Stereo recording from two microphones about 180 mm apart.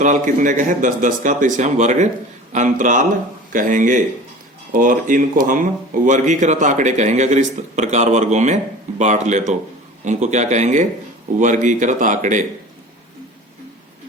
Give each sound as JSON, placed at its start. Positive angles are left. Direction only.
{"t": 0.0, "sound": "a man's voice", "side_deg": -45}